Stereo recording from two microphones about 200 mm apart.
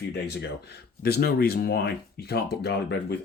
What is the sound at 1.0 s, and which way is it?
Speech, 50° left (ahead or behind).